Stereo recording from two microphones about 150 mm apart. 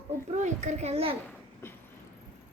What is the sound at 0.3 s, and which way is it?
Speech, 55° right (ahead or behind).